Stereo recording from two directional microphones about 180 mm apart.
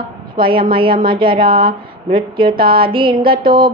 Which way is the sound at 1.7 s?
55° right (ahead or behind).